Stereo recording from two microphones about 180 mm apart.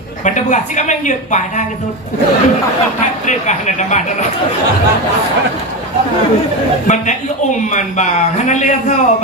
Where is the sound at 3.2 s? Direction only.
40° left (ahead or behind).